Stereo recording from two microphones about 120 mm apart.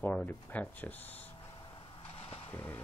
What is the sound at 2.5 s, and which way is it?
Speech, 15° left (ahead or behind).